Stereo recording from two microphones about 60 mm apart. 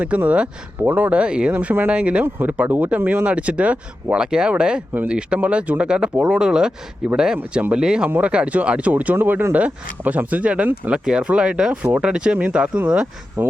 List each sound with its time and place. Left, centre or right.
0.0 s speech: right
1.5 s speech: right
3.3 s speech: right
13.4 s speech: right